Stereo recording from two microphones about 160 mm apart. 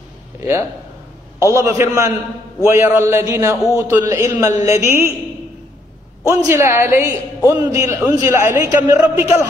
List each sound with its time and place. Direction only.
0.4 s a woman's voice: 20° right (ahead or behind)
6.2 s a woman's voice: 20° right (ahead or behind)